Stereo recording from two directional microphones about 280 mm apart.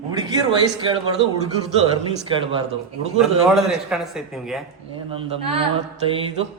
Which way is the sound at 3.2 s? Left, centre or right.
Centre.